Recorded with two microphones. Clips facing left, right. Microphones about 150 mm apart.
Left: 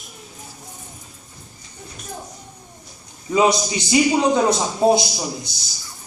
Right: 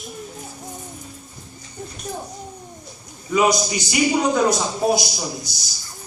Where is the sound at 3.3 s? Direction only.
25° left (ahead or behind).